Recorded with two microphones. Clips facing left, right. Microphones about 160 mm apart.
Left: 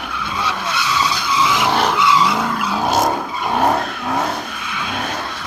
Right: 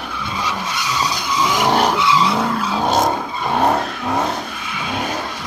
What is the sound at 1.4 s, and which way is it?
Vehicle, 40° right (ahead or behind).